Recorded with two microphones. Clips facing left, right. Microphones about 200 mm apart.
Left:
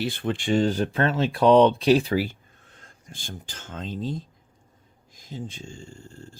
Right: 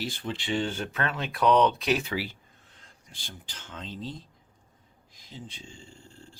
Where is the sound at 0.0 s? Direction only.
60° left (ahead or behind).